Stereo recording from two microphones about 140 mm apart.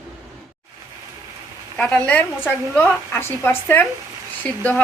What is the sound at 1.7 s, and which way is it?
Speech, 10° left (ahead or behind).